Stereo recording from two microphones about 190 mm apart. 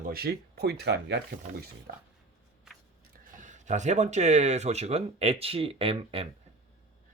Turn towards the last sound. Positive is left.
turn(degrees=-30)  # may be behind; listen again after turning